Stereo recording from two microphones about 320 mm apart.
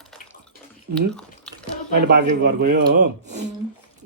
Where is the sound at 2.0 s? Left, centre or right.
Right.